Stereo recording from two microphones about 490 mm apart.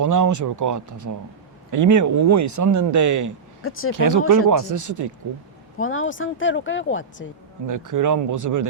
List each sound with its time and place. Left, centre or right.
0.0 s speech: right
3.6 s speech: left
3.9 s speech: right
5.7 s speech: left
7.7 s speech: right